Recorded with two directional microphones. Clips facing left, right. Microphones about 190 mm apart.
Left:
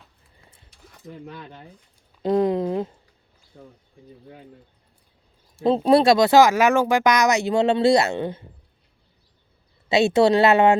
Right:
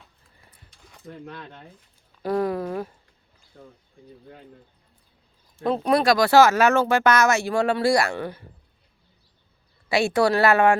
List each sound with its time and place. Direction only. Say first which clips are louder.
0.9 s speech: left 1 dB; 5° left (ahead or behind)
2.2 s a sound: left 4 dB; 20° left (ahead or behind)
5.6 s speech: left 4 dB; 25° left (ahead or behind)
9.9 s speech: left 4 dB; 20° left (ahead or behind)